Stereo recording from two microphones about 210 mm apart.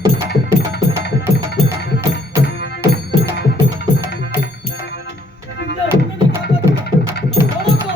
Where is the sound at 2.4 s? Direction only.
50° left (ahead or behind).